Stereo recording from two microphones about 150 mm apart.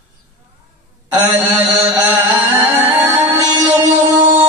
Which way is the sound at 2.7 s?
15° right (ahead or behind).